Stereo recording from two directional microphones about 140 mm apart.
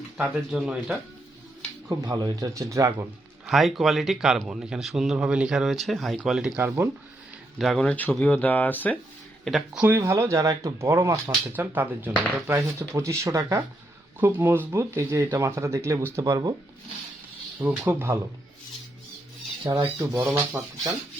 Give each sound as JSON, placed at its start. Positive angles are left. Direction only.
{"t": 0.2, "sound": "speech", "side_deg": -5}
{"t": 1.9, "sound": "speech", "side_deg": -30}
{"t": 3.4, "sound": "a man's voice", "side_deg": 0}
{"t": 6.6, "sound": "speech", "side_deg": -20}
{"t": 7.6, "sound": "speech", "side_deg": 5}
{"t": 9.4, "sound": "speech", "side_deg": 0}
{"t": 9.8, "sound": "speech", "side_deg": -15}
{"t": 17.6, "sound": "speech", "side_deg": -10}
{"t": 19.6, "sound": "speech", "side_deg": -30}